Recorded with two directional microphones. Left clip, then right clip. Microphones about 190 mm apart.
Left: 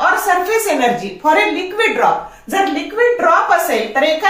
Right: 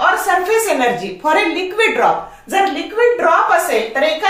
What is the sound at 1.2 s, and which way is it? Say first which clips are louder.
Speech: left 2 dB; 30° right (ahead or behind).